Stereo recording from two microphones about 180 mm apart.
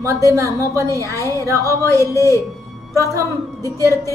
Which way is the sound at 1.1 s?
15° left (ahead or behind).